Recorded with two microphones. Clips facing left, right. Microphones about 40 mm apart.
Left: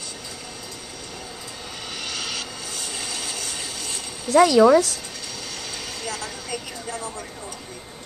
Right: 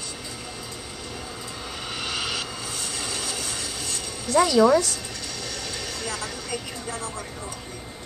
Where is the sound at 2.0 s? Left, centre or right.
Centre.